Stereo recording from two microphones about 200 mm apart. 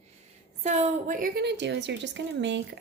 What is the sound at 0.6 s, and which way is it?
A woman's voice, 35° right (ahead or behind).